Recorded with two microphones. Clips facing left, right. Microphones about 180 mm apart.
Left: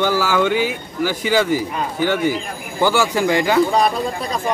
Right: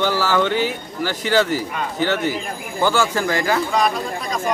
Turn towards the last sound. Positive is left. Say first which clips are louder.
# left 2 dB
turn(degrees=35)  # may be behind; listen again after turning